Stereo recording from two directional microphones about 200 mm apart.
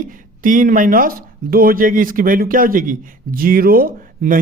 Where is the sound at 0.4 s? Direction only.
40° right (ahead or behind).